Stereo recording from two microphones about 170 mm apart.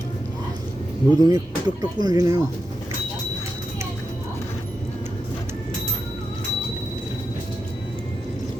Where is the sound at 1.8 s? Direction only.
25° right (ahead or behind).